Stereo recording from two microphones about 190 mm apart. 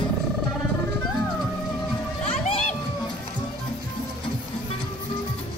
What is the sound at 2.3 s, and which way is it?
Crowd, 35° left (ahead or behind).